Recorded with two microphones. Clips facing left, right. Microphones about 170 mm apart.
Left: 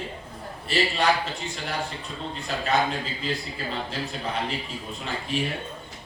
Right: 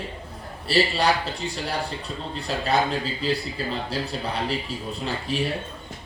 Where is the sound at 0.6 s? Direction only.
35° right (ahead or behind).